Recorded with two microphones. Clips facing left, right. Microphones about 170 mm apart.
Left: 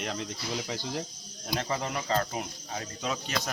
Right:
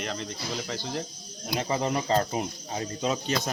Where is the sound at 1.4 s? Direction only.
15° right (ahead or behind).